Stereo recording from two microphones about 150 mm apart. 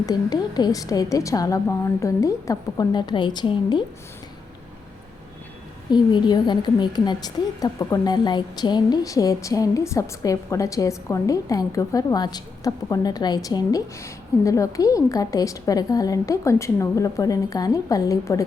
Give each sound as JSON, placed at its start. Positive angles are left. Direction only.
{"t": 0.0, "sound": "a woman's voice", "side_deg": 25}
{"t": 5.9, "sound": "a woman's voice", "side_deg": 30}